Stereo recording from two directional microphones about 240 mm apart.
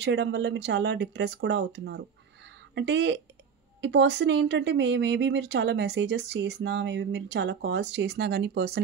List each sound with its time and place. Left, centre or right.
0.0 s speech: right